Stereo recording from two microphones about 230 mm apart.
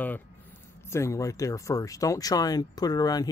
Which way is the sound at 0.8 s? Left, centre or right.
Centre.